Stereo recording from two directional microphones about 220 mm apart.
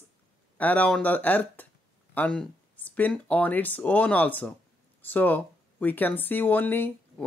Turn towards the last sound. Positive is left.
turn(degrees=10)  # may be behind; listen again after turning